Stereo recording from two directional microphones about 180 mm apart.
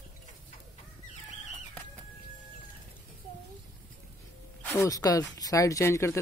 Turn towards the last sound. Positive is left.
turn(degrees=15)  # may be behind; listen again after turning